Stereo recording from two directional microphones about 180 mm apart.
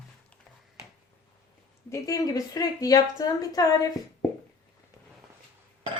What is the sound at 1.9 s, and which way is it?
A woman's voice, 20° left (ahead or behind).